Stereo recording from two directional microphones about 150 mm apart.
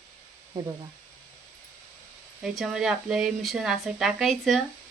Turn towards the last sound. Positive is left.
turn(degrees=0)  # may be behind; listen again after turning